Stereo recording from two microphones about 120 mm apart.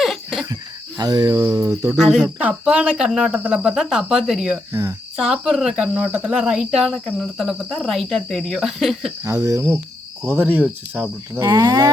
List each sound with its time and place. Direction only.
0.0 s cricket: centre (ahead or behind)
0.5 s cricket: 35° right (ahead or behind)
1.5 s speech: 30° right (ahead or behind)
2.0 s speech: 5° right (ahead or behind)
4.7 s speech: 25° right (ahead or behind)
5.1 s speech: centre (ahead or behind)
9.2 s speech: 25° right (ahead or behind)
11.4 s speech: 30° right (ahead or behind)